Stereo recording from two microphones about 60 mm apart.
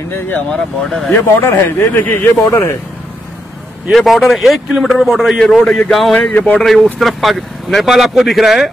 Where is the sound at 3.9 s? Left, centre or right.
Centre.